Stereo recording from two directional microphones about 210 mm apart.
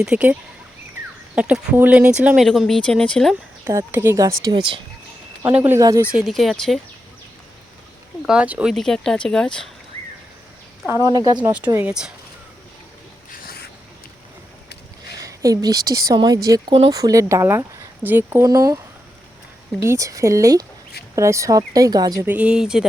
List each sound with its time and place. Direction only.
0.0 s speech: 5° right (ahead or behind)
1.4 s speech: 5° right (ahead or behind)
3.6 s speech: 10° right (ahead or behind)
5.4 s speech: 10° right (ahead or behind)
6.1 s speech: centre (ahead or behind)
8.3 s speech: 5° right (ahead or behind)
10.8 s speech: 15° right (ahead or behind)
11.5 s speech: 10° right (ahead or behind)
15.2 s speech: 15° right (ahead or behind)
19.8 s speech: 15° right (ahead or behind)